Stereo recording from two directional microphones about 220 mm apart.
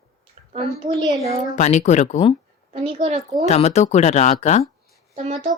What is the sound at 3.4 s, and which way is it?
Speech, 30° left (ahead or behind).